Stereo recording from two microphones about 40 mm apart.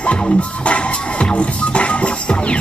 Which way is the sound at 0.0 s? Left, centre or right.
Left.